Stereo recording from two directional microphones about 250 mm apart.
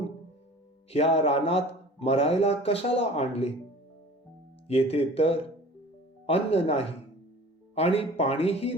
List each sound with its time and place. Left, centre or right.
0.9 s speech: left
4.7 s speech: left